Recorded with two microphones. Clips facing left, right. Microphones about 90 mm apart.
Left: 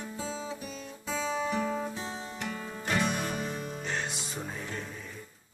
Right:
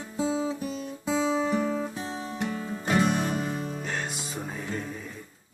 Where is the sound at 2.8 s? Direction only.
30° right (ahead or behind).